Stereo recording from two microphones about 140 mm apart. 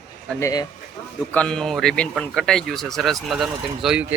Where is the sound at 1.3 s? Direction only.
5° left (ahead or behind).